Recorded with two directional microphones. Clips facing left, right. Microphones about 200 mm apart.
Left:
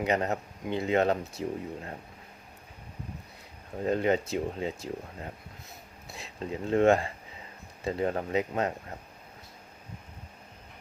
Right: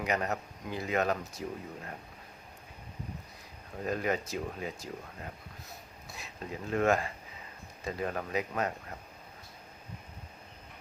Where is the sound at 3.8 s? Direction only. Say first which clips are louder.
Left 6 dB; 25° left (ahead or behind).